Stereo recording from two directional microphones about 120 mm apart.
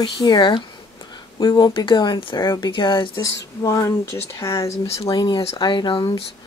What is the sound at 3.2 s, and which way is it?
Speech, 25° left (ahead or behind).